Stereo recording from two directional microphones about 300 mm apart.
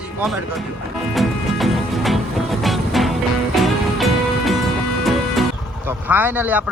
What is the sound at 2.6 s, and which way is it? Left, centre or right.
Music, centre.